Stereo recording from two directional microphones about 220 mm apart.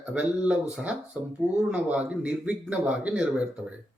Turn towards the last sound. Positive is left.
turn(degrees=-5)  # may be behind; listen again after turning